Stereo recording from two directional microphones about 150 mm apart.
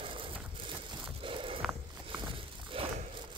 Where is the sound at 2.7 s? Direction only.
40° right (ahead or behind).